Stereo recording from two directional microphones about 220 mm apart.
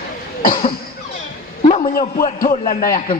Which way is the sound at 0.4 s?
40° left (ahead or behind).